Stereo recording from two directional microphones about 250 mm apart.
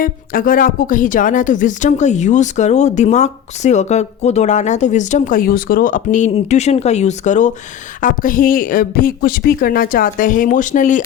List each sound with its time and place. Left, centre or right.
0.0 s speech: left